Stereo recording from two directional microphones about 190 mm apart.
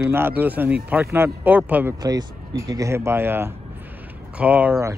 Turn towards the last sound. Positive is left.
turn(degrees=-10)  # may be behind; listen again after turning